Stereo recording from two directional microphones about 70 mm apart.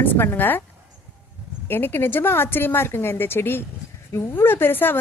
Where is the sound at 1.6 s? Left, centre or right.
Left.